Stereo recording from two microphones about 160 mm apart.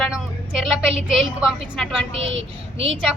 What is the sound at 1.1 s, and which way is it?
Speech, 5° right (ahead or behind).